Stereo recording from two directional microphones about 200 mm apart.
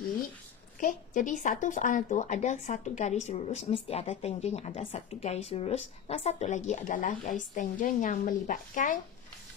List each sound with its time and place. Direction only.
0.7 s a woman's voice: 40° left (ahead or behind)